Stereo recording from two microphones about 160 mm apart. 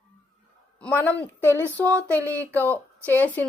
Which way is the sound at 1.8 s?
20° right (ahead or behind).